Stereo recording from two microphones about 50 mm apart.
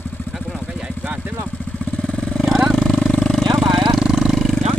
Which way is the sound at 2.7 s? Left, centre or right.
Centre.